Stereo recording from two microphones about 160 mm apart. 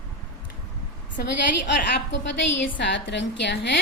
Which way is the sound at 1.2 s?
80° left.